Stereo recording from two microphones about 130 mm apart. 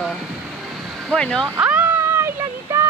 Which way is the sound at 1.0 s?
5° left (ahead or behind).